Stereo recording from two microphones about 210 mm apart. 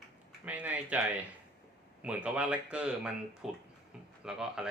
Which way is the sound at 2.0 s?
5° right (ahead or behind).